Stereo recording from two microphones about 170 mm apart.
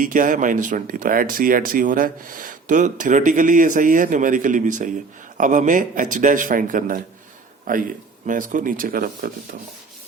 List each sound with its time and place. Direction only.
0.0 s speech: 50° right (ahead or behind)